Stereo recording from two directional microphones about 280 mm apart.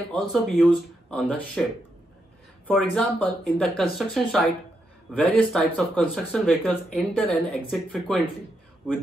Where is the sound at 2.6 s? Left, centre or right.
Centre.